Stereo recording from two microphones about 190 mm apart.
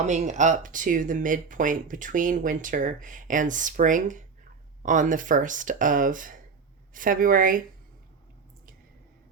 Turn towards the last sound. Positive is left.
turn(degrees=-45)  # may be behind; listen again after turning